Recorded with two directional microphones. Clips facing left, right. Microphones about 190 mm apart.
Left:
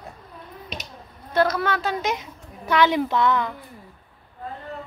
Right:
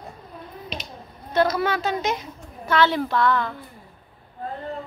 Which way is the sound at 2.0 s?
15° left (ahead or behind).